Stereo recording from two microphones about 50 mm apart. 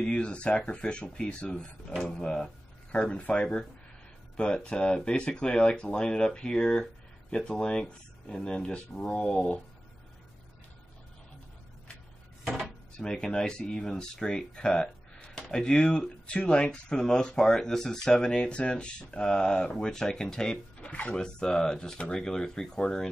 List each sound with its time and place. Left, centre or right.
0.0 s speech: left
12.4 s dishes: centre
12.9 s speech: centre